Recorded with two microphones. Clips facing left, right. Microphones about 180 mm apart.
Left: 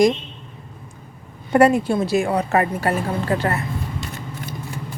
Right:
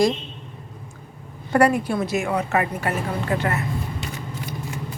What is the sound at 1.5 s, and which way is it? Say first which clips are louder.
A woman's voice: left 3 dB; 25° left (ahead or behind).